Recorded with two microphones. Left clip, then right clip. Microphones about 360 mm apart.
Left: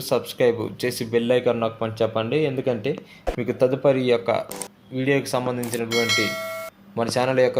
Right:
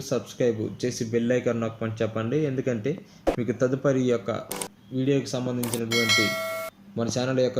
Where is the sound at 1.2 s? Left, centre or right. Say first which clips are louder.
Left 5 dB; left.